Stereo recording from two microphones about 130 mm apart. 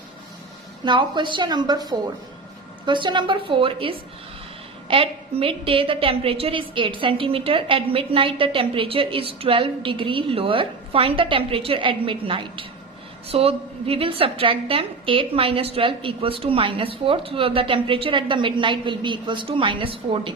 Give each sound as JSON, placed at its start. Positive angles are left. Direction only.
{"t": 0.9, "sound": "a woman's voice", "side_deg": -40}